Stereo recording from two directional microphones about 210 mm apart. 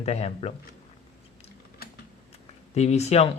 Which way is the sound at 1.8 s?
45° left (ahead or behind).